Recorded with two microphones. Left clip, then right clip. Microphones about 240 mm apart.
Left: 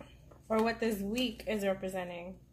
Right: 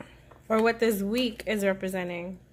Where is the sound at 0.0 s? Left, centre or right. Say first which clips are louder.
Right 7 dB; right.